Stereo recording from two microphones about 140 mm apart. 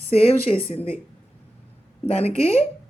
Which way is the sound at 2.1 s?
45° left (ahead or behind).